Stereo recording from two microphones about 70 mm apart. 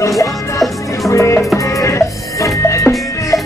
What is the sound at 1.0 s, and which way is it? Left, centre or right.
Music, left.